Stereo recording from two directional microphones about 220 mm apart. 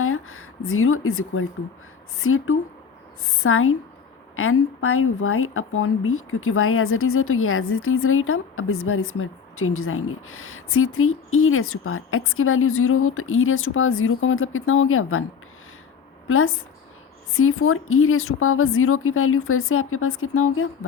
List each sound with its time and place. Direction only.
0.0 s speech: 70° left (ahead or behind)
16.2 s a woman's voice: 70° left (ahead or behind)